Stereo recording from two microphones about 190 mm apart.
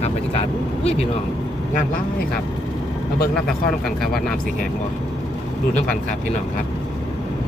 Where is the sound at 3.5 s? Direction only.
Centre (ahead or behind).